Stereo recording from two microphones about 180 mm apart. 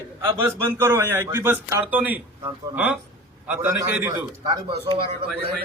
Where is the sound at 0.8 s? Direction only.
15° right (ahead or behind); by 5.0 s 30° right (ahead or behind).